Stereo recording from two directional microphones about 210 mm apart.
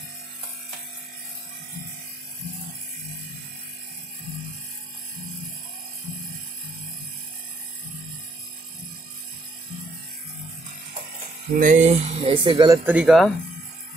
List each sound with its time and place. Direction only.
11.5 s speech: 40° right (ahead or behind); by 12.9 s 15° right (ahead or behind)
12.9 s speech: centre (ahead or behind)